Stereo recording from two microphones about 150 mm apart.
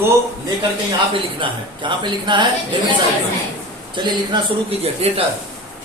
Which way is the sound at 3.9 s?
30° right (ahead or behind).